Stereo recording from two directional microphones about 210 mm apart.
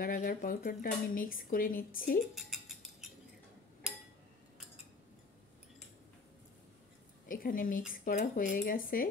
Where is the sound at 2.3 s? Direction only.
Centre (ahead or behind).